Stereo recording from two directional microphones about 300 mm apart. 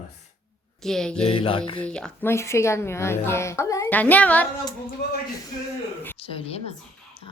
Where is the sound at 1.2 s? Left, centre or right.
Centre.